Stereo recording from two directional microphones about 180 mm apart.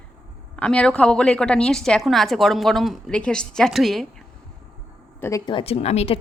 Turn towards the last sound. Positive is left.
turn(degrees=35)  # may be behind; listen again after turning